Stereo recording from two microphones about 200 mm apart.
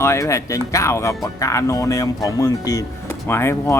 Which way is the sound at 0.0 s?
15° left (ahead or behind).